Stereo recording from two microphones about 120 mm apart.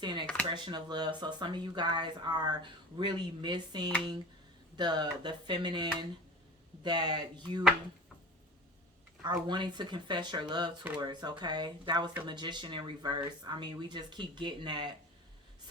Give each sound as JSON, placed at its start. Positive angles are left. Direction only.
{"t": 0.0, "sound": "speech", "side_deg": -40}
{"t": 9.5, "sound": "speech", "side_deg": -40}